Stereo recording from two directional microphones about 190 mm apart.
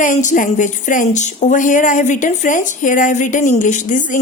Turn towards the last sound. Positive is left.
turn(degrees=45)  # may be behind; listen again after turning